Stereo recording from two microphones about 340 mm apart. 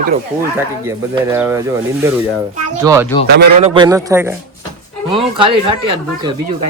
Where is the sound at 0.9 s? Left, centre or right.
Centre.